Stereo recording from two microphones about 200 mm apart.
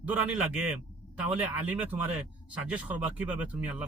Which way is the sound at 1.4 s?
10° right (ahead or behind).